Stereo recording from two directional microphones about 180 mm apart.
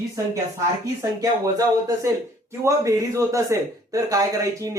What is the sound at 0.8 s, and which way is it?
Speech, 20° right (ahead or behind).